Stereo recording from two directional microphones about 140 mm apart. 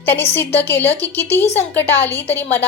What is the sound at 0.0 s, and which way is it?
A woman's voice, 15° left (ahead or behind).